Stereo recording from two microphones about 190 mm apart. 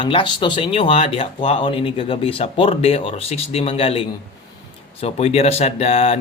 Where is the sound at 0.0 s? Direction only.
25° left (ahead or behind).